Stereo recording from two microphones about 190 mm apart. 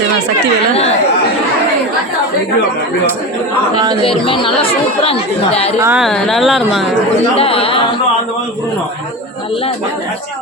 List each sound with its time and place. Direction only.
0.7 s speech: 30° left (ahead or behind)
4.0 s speech: 30° left (ahead or behind)
5.8 s speech: 10° right (ahead or behind)
6.1 s speech: centre (ahead or behind)
7.3 s speech: 30° left (ahead or behind)